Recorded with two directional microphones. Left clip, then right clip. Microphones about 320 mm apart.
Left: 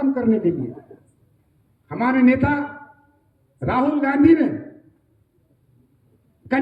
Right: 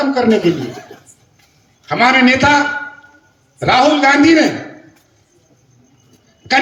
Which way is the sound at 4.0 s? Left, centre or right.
Right.